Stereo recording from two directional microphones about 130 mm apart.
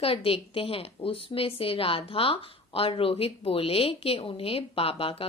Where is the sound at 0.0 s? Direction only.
45° left (ahead or behind).